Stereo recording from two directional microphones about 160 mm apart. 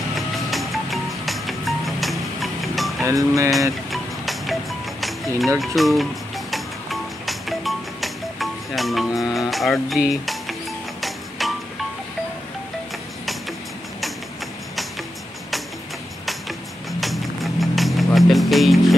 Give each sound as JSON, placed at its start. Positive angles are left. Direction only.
{"t": 0.1, "sound": "music", "side_deg": 0}
{"t": 3.1, "sound": "speech", "side_deg": -20}
{"t": 3.9, "sound": "music", "side_deg": 0}
{"t": 17.0, "sound": "music", "side_deg": 0}